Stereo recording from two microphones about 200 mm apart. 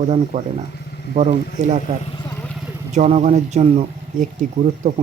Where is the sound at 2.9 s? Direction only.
35° right (ahead or behind).